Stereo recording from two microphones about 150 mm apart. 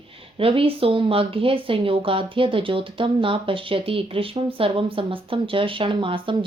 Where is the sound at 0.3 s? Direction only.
35° right (ahead or behind).